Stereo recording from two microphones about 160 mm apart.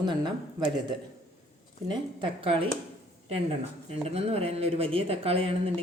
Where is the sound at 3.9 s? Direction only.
40° right (ahead or behind).